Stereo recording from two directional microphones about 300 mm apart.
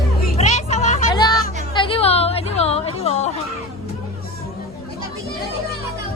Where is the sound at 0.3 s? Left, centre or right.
Left.